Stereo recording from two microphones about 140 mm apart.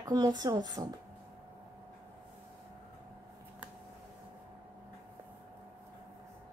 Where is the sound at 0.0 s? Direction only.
25° right (ahead or behind).